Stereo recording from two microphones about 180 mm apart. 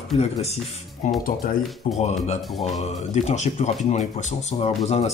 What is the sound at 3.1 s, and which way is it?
Speech, 40° left (ahead or behind).